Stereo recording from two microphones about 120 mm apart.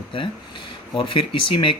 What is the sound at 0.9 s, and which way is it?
Speech, 45° left (ahead or behind).